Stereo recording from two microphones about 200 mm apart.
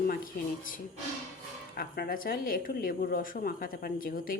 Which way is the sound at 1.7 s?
50° left (ahead or behind).